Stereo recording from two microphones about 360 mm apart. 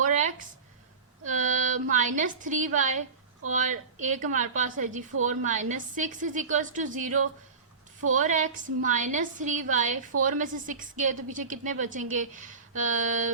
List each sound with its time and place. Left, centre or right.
0.0 s a sound: right
3.5 s a woman's voice: right
8.1 s a woman's voice: right